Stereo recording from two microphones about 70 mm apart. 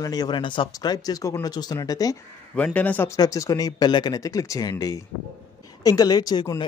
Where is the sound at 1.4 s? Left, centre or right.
Left.